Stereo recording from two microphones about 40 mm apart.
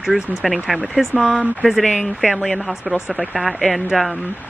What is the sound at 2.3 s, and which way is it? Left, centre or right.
Speech, centre.